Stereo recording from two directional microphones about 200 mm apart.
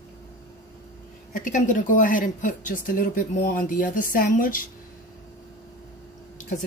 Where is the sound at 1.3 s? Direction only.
40° left (ahead or behind).